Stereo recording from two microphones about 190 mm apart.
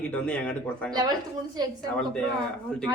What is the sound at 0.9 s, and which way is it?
Speech, 20° right (ahead or behind).